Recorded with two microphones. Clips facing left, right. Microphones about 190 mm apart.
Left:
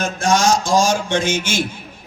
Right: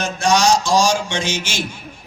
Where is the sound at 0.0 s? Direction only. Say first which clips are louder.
Even; 50° left (ahead or behind).